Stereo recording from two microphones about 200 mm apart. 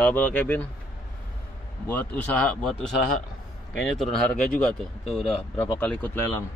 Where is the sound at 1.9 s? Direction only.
5° left (ahead or behind).